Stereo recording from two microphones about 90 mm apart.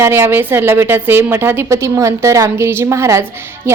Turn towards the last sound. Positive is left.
turn(degrees=-30)  # may be behind; listen again after turning